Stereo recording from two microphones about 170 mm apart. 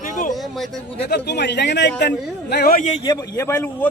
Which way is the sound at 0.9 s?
75° left (ahead or behind).